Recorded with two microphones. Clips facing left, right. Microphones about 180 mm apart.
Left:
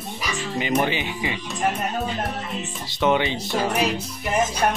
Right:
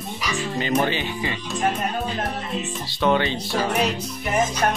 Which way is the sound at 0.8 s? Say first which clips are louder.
Right 1 dB; 15° left (ahead or behind).